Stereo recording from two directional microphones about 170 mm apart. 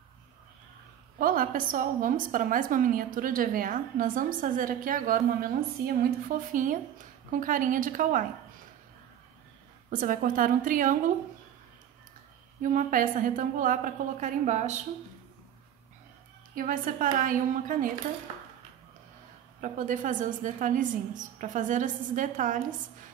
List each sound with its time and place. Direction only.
1.1 s a woman's voice: 55° right (ahead or behind)
9.8 s a woman's voice: 55° right (ahead or behind)
12.6 s a woman's voice: 50° right (ahead or behind)
16.5 s a woman's voice: 55° right (ahead or behind)
19.6 s a woman's voice: 50° right (ahead or behind)